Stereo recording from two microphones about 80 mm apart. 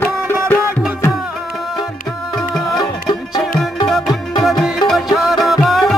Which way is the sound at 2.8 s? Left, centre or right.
Left.